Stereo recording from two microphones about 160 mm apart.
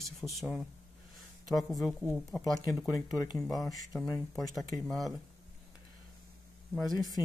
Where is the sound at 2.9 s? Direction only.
25° left (ahead or behind).